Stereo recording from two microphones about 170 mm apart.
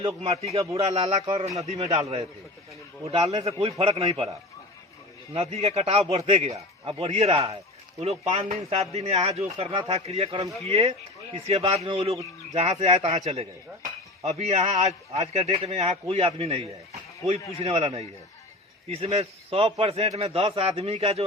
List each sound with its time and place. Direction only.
0.2 s speech: 35° right (ahead or behind)
5.3 s speech: 35° right (ahead or behind)